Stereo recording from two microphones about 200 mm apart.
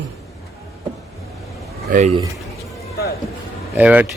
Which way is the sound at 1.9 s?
45° right (ahead or behind).